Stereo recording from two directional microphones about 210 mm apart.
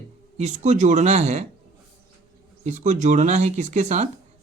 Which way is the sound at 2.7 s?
35° right (ahead or behind).